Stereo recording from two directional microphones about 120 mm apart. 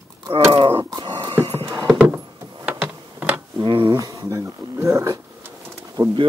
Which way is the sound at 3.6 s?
45° right (ahead or behind).